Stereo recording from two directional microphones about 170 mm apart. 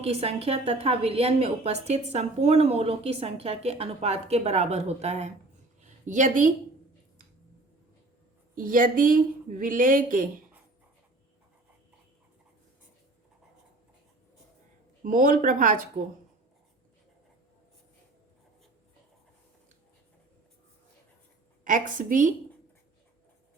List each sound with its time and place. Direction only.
0.0 s a woman's voice: 35° right (ahead or behind)
5.8 s a sound: 45° right (ahead or behind)
8.5 s a woman's voice: 55° right (ahead or behind)
15.0 s a woman's voice: 50° right (ahead or behind)
21.6 s a woman's voice: 50° right (ahead or behind)